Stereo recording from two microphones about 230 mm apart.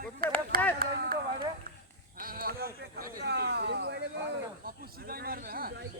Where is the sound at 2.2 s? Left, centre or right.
Right.